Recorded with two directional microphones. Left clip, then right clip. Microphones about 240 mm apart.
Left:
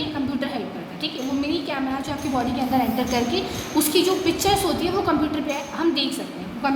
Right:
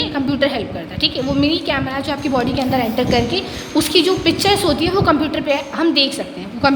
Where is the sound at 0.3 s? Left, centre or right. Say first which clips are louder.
Right 10 dB; right.